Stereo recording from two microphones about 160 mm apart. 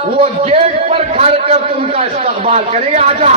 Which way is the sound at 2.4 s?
45° right (ahead or behind).